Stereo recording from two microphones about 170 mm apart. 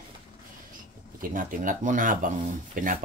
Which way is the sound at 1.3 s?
50° right (ahead or behind).